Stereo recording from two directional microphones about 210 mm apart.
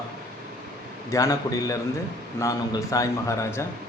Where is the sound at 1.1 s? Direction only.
15° left (ahead or behind).